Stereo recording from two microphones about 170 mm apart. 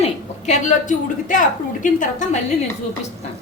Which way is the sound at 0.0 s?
45° left (ahead or behind).